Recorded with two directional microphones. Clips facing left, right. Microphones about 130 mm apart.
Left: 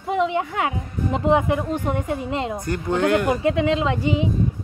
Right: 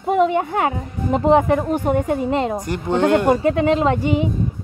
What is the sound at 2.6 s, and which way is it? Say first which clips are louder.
Speech: right 3 dB; 25° right (ahead or behind).